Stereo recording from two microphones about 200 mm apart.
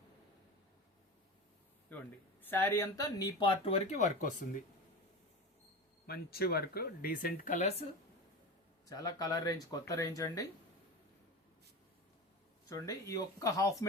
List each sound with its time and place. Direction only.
1.9 s speech: 10° left (ahead or behind); by 4.4 s 40° left (ahead or behind)
6.1 s speech: 50° left (ahead or behind); by 7.9 s 35° left (ahead or behind)
8.9 s speech: 20° left (ahead or behind)
12.6 s speech: 15° left (ahead or behind)